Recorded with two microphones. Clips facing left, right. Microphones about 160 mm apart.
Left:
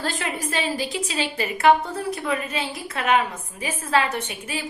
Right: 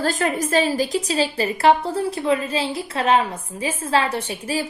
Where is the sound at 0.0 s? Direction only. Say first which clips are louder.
Right 6 dB; 45° right (ahead or behind).